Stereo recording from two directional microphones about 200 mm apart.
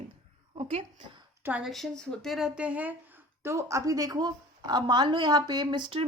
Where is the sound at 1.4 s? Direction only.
5° right (ahead or behind).